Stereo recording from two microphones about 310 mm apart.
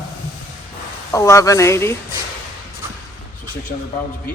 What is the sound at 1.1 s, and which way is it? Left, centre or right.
Speech, centre.